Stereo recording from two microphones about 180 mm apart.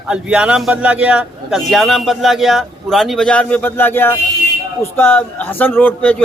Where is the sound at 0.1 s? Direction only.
5° right (ahead or behind).